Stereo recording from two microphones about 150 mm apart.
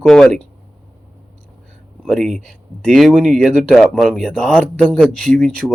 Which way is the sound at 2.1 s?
5° left (ahead or behind).